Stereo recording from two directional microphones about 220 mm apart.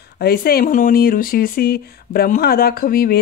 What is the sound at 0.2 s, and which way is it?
Speech, 45° left (ahead or behind).